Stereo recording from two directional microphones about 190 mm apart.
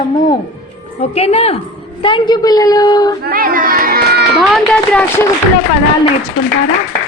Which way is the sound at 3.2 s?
50° right (ahead or behind).